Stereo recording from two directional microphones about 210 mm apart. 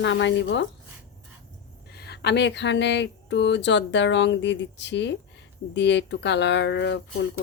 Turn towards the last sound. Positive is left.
turn(degrees=60)  # may be behind; listen again after turning